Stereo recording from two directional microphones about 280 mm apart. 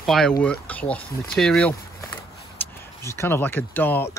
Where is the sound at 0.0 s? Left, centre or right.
Centre.